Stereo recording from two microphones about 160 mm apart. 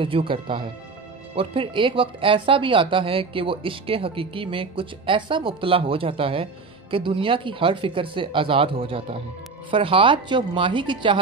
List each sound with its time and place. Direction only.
0.0 s speech: 35° right (ahead or behind)